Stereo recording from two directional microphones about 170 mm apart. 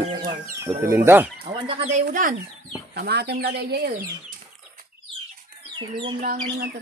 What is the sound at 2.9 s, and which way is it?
Speech, 75° right (ahead or behind).